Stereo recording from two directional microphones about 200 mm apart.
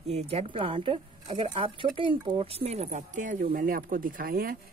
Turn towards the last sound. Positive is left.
turn(degrees=-45)  # may be behind; listen again after turning